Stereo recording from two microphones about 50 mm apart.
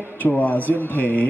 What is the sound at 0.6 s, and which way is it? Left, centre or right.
Speech, right.